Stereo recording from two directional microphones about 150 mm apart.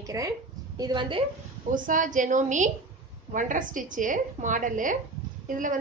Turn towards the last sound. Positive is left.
turn(degrees=-60)  # may be behind; listen again after turning